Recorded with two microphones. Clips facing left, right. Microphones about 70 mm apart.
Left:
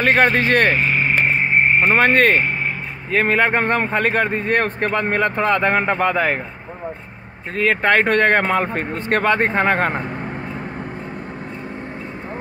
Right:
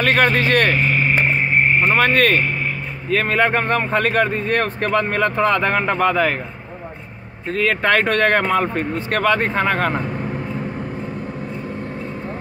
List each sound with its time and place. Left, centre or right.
0.0 s speech: left
7.5 s speech: left